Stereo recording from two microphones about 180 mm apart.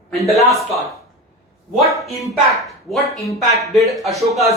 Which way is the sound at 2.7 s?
Centre (ahead or behind).